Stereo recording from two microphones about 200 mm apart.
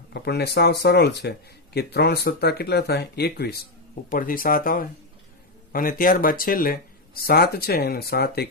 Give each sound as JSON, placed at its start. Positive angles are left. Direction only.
{"t": 0.1, "sound": "speech", "side_deg": 55}